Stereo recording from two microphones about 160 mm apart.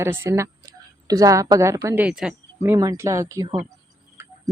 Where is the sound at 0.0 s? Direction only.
15° right (ahead or behind).